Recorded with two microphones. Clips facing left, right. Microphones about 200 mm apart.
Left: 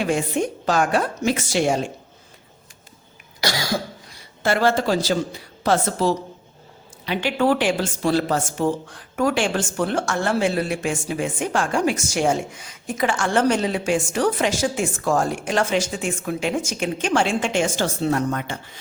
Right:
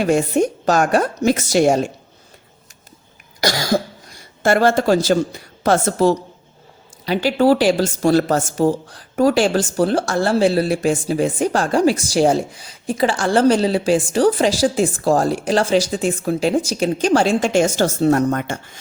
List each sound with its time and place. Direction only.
0.0 s a woman's voice: 40° right (ahead or behind)
4.4 s a woman's voice: 45° right (ahead or behind)